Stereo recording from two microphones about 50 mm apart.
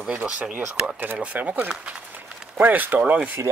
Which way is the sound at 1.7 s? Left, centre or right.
Right.